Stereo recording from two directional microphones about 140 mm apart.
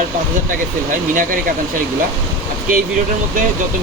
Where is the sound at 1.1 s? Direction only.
75° right (ahead or behind).